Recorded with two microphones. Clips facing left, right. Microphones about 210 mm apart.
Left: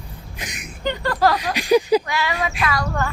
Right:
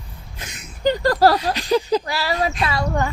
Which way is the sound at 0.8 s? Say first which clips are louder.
Right 4 dB; 40° right (ahead or behind).